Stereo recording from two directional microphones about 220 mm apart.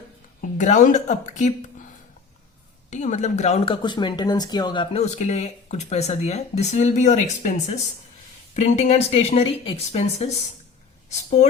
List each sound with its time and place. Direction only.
0.4 s a woman's voice: 35° left (ahead or behind)
2.9 s speech: 35° left (ahead or behind)